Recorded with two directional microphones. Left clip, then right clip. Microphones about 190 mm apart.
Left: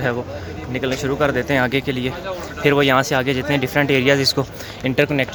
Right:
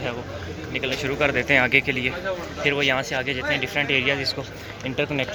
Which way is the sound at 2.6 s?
45° left (ahead or behind).